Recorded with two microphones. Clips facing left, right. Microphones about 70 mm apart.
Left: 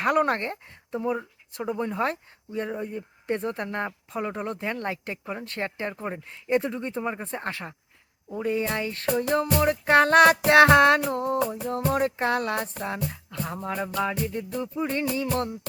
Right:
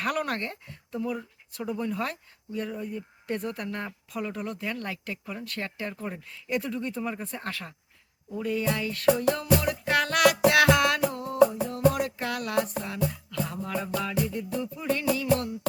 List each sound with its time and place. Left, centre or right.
0.0 s speech: left
8.3 s music: left